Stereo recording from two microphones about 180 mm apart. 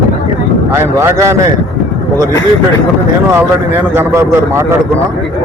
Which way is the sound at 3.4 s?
10° right (ahead or behind).